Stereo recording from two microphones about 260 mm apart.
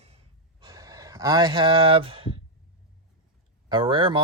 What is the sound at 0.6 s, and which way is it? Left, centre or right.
Speech, centre.